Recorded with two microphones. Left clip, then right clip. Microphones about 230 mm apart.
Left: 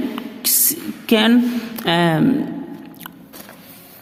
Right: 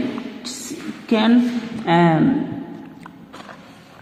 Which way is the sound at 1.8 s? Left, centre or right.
Left.